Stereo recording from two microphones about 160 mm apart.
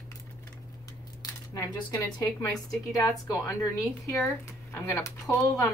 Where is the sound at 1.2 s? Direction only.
20° left (ahead or behind).